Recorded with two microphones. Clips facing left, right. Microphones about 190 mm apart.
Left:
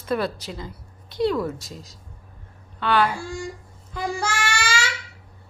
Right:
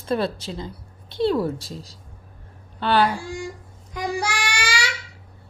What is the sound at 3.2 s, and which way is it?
Speech, 15° right (ahead or behind).